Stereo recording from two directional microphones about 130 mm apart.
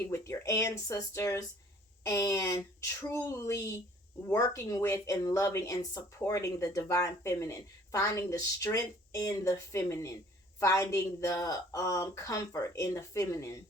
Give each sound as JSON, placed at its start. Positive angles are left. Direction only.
{"t": 0.1, "sound": "speech", "side_deg": 25}